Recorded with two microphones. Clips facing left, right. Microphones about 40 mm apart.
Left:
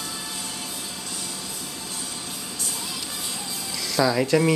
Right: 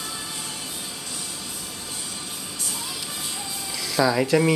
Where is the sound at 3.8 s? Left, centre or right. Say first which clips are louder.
Right 1 dB; centre.